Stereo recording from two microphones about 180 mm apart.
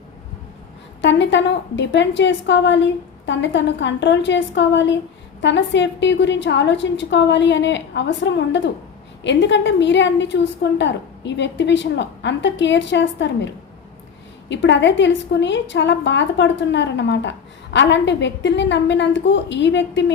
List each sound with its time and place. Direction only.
1.0 s a woman's voice: 80° left
14.5 s a woman's voice: 80° left